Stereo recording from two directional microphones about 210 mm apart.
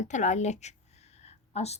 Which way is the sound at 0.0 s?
35° left (ahead or behind).